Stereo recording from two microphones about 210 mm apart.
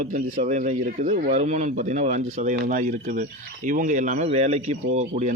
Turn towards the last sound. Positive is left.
turn(degrees=-30)  # may be behind; listen again after turning